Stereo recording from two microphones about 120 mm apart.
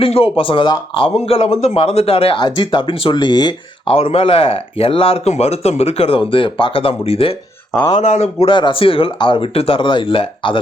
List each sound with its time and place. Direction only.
0.0 s speech: 50° left (ahead or behind)
3.9 s speech: 55° left (ahead or behind)
7.9 s speech: 70° left (ahead or behind)
8.4 s speech: 45° left (ahead or behind)